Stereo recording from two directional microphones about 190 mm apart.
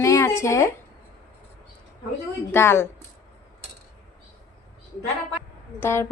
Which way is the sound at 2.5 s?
10° left (ahead or behind).